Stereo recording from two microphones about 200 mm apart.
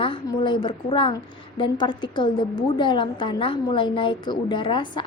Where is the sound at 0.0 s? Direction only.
25° left (ahead or behind).